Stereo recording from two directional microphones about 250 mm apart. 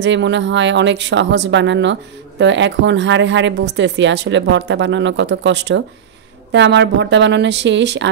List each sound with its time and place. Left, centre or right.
0.0 s speech: right